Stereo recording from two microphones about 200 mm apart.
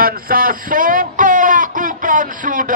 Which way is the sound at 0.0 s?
45° right (ahead or behind).